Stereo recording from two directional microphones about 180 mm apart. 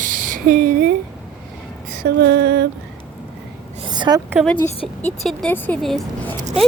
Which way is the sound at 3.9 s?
20° right (ahead or behind).